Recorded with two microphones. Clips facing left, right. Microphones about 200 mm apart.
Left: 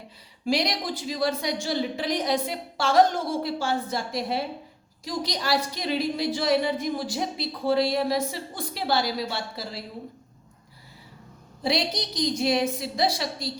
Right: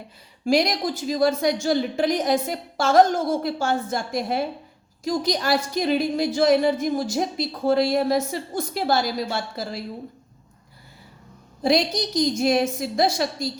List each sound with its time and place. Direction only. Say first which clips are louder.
0.4 s a woman's voice: right 5 dB; 45° right (ahead or behind)
11.6 s a woman's voice: right 6 dB; 45° right (ahead or behind)